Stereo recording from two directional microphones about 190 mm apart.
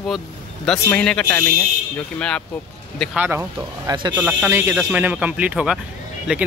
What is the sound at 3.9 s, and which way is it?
Speech, 20° right (ahead or behind).